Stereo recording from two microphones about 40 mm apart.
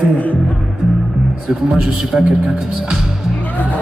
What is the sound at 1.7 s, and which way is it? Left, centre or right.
Speech, centre.